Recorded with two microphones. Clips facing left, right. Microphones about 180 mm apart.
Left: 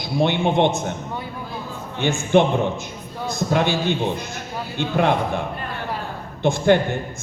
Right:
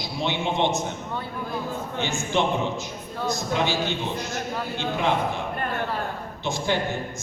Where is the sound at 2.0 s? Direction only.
55° left (ahead or behind).